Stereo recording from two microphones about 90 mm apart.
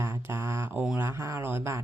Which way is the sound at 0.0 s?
25° right (ahead or behind).